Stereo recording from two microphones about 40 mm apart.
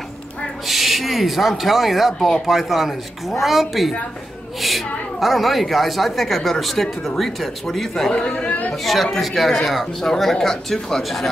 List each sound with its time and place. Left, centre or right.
0.7 s a woman's voice: centre
2.1 s speech: centre
2.4 s a woman's voice: centre
8.1 s speech: left
8.8 s a woman's voice: centre